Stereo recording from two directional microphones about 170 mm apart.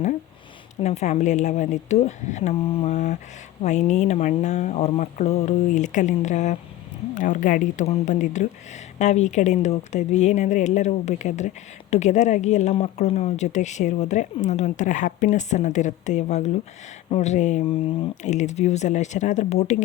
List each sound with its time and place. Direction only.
0.8 s speech: 40° left (ahead or behind)